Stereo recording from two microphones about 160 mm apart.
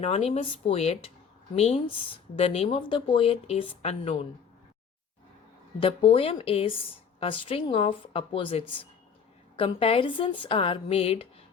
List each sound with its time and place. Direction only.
0.0 s speech: 40° left (ahead or behind)
5.8 s speech: 35° left (ahead or behind)